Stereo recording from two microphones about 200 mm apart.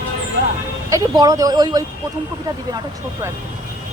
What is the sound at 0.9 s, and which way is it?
Speech, 15° right (ahead or behind).